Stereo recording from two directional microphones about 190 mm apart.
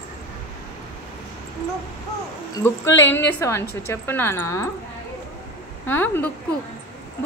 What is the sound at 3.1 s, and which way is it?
Speech, 15° left (ahead or behind).